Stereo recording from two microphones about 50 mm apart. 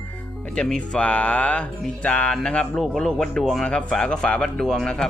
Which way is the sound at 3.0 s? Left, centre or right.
Centre.